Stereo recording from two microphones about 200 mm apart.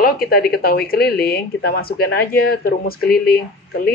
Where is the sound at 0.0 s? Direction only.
45° left (ahead or behind).